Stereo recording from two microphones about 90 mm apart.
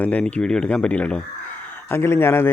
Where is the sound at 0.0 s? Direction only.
15° left (ahead or behind).